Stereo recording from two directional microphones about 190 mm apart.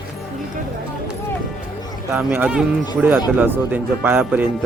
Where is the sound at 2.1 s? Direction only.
10° right (ahead or behind).